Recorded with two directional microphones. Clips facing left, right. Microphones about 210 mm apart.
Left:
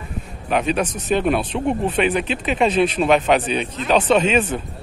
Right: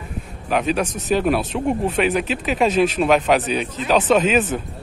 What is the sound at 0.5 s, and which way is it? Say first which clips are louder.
Speech: even; centre (ahead or behind).